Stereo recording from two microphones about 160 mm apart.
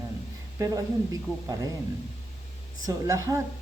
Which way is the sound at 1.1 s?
20° right (ahead or behind).